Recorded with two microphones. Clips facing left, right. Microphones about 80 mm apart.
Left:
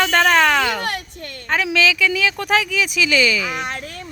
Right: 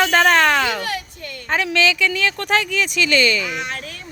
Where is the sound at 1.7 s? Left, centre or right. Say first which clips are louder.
Left 1 dB; centre.